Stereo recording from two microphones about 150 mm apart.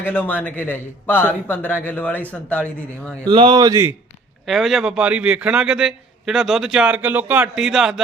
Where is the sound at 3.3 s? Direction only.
35° right (ahead or behind).